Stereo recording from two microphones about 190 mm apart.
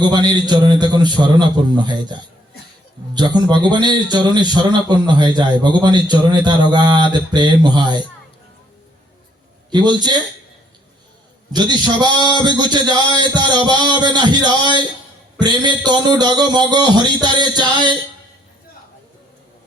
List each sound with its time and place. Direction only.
0.0 s a man's voice: 25° right (ahead or behind)
3.2 s a man's voice: 20° right (ahead or behind)
9.6 s speech: 25° right (ahead or behind)
11.5 s a man's voice: 20° right (ahead or behind)